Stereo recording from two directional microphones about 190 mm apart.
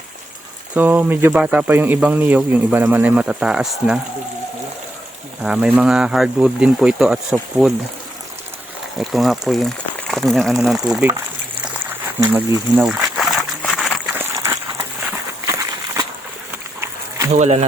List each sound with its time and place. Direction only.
0.7 s speech: 10° right (ahead or behind)
5.4 s speech: 5° right (ahead or behind)
9.0 s speech: centre (ahead or behind)
11.6 s a sound: 10° right (ahead or behind)
17.3 s speech: 35° right (ahead or behind)